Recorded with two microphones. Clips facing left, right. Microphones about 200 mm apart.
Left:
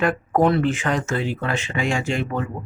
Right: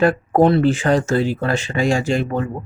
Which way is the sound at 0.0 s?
35° right (ahead or behind).